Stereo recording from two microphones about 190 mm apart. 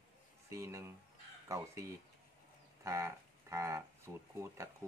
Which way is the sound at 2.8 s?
15° right (ahead or behind).